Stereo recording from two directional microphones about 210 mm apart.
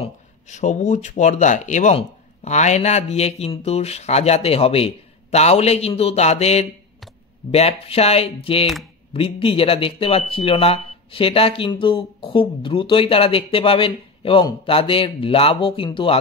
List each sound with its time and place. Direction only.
0.0 s speech: 35° left (ahead or behind)